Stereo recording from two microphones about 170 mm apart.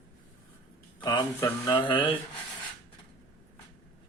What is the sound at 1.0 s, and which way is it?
Speech, 20° left (ahead or behind).